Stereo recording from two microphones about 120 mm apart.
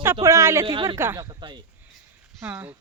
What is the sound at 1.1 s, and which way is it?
Speech, 35° right (ahead or behind).